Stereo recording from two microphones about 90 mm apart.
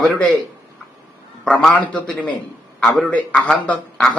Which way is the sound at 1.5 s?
10° left (ahead or behind).